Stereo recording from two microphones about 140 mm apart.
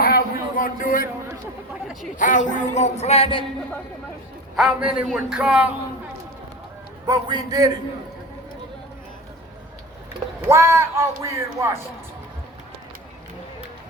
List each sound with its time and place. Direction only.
0.0 s a sound: 90° left
2.1 s speech: 65° left (ahead or behind); by 3.4 s 40° left (ahead or behind)
4.5 s a man's voice: 5° right (ahead or behind)
7.0 s speech: 30° right (ahead or behind)
10.5 s speech: 20° right (ahead or behind)